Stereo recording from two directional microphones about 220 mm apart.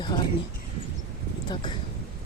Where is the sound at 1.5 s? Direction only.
20° left (ahead or behind).